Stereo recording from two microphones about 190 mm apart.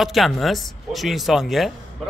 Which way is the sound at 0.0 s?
Centre (ahead or behind).